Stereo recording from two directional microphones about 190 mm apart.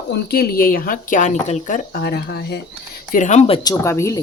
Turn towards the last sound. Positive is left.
turn(degrees=15)  # may be behind; listen again after turning